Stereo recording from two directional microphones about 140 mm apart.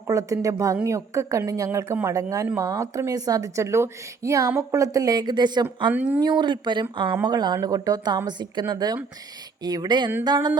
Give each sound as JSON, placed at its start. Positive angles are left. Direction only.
{"t": 0.1, "sound": "a woman's voice", "side_deg": -25}
{"t": 5.9, "sound": "speech", "side_deg": -10}
{"t": 6.1, "sound": "a woman's voice", "side_deg": -30}